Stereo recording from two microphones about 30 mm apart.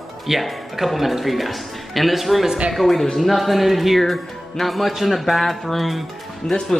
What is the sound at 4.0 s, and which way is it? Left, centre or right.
A man's voice, centre.